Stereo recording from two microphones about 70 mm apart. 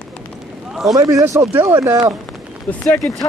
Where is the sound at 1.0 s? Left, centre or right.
Right.